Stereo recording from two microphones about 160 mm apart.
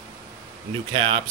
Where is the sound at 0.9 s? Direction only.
35° right (ahead or behind).